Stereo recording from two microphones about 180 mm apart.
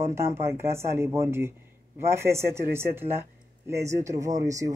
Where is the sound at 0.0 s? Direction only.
15° right (ahead or behind).